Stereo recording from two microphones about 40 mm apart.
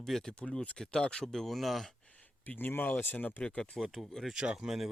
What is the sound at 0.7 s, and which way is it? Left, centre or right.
Speech, centre.